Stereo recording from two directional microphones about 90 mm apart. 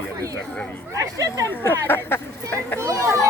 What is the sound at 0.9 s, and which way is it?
Speech, 40° right (ahead or behind).